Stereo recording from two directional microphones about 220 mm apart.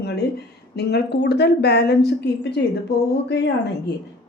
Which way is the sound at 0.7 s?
50° left (ahead or behind).